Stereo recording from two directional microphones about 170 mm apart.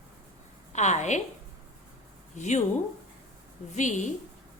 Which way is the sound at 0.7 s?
45° left (ahead or behind).